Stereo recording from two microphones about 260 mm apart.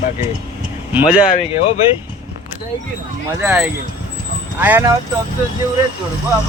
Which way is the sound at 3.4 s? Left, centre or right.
Centre.